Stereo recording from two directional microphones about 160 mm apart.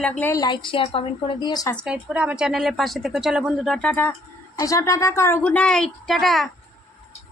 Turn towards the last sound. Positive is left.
turn(degrees=0)  # may be behind; listen again after turning